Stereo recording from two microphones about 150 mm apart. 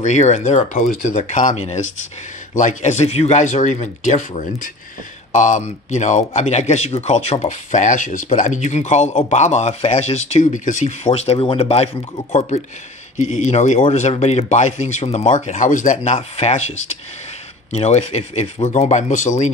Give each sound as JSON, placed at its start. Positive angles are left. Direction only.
{"t": 0.0, "sound": "speech", "side_deg": 50}